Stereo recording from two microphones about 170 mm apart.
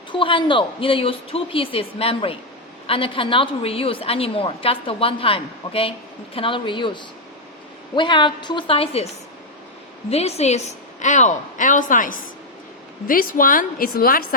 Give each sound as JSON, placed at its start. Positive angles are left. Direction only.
{"t": 0.1, "sound": "a woman's voice", "side_deg": 30}
{"t": 10.1, "sound": "a woman's voice", "side_deg": 40}